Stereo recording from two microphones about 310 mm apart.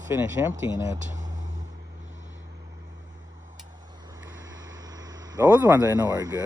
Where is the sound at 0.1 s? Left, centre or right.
Centre.